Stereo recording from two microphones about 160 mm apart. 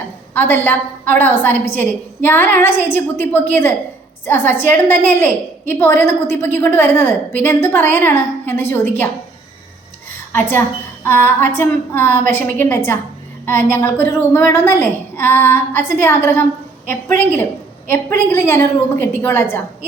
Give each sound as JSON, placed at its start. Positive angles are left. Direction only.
{"t": 0.3, "sound": "a woman's voice", "side_deg": 10}
{"t": 10.1, "sound": "a sound", "side_deg": 15}
{"t": 11.0, "sound": "a woman's voice", "side_deg": 15}